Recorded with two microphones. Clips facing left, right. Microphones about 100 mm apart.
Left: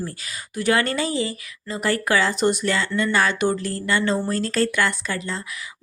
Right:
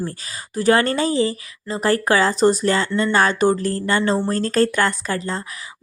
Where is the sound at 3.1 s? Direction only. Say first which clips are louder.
Right 5 dB; 40° right (ahead or behind).